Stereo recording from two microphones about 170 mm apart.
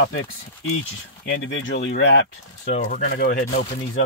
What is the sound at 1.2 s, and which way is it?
Speech, 90° left.